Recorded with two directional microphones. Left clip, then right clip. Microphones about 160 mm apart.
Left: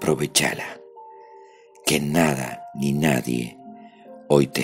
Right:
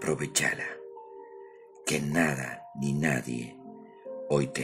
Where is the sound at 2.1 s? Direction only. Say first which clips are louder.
Left 6 dB; 25° left (ahead or behind).